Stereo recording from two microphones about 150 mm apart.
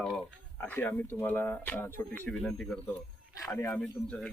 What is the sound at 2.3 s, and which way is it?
Speech, centre (ahead or behind).